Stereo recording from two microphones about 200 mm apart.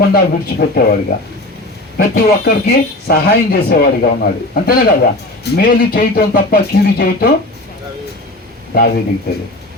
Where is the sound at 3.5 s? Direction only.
50° left (ahead or behind).